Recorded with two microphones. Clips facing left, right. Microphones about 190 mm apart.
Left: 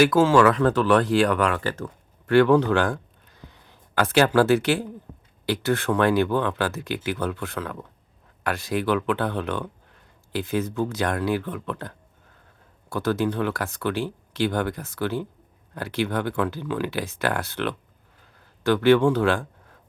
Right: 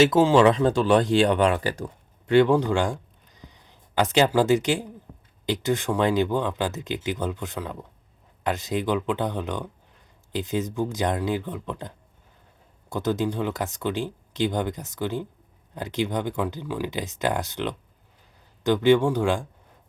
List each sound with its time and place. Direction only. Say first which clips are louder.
0.0 s speech: even; 20° right (ahead or behind)